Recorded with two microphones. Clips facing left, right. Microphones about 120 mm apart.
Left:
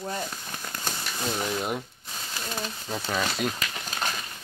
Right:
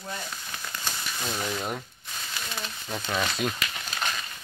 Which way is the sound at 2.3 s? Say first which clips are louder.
Left 4 dB; 40° left (ahead or behind).